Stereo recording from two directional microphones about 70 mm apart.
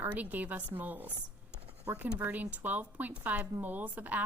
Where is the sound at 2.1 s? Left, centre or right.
Right.